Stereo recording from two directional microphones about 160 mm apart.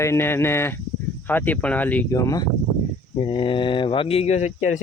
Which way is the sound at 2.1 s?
20° left (ahead or behind).